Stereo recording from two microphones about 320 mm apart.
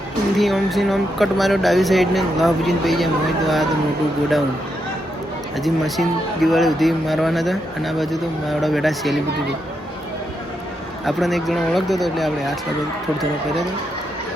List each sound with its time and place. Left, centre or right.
0.3 s speech: centre
5.6 s speech: centre
11.0 s speech: centre